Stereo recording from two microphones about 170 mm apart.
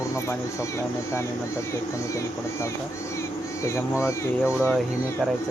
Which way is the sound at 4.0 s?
15° left (ahead or behind).